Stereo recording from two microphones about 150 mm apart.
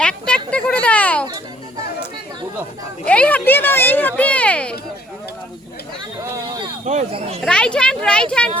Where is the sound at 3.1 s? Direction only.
10° left (ahead or behind).